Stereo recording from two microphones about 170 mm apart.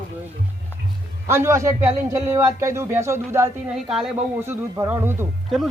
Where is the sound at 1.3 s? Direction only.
15° right (ahead or behind).